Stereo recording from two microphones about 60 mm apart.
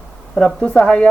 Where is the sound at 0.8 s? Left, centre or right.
Centre.